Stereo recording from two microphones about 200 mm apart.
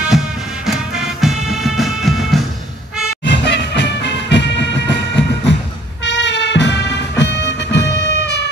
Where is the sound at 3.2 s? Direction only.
60° left (ahead or behind).